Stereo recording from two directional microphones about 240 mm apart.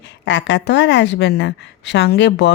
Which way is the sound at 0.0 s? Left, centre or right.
Left.